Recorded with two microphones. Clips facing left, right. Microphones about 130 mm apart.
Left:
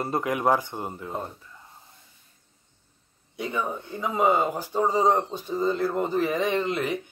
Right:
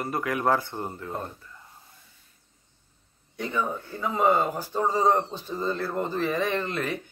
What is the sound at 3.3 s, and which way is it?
Speech, 10° left (ahead or behind).